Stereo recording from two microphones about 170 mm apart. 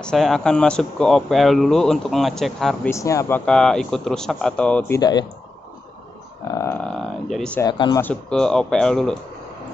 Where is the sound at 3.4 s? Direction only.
5° left (ahead or behind).